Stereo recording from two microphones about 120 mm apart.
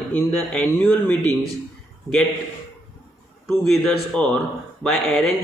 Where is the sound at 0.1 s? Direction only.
10° left (ahead or behind).